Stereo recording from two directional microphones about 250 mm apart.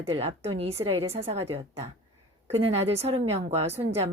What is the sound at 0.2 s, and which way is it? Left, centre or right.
A woman's voice, right.